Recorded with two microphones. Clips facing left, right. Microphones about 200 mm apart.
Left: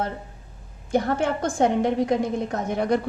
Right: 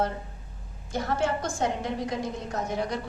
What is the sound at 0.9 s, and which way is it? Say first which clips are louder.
A woman's voice: left 5 dB; 55° left (ahead or behind).